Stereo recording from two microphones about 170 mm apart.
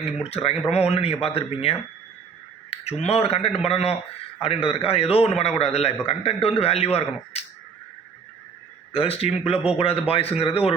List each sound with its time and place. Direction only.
0.0 s a man's voice: 35° left (ahead or behind)
8.9 s a man's voice: 35° left (ahead or behind)